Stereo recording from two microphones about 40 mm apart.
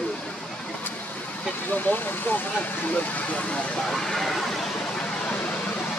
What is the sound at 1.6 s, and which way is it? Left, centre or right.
Speech, left.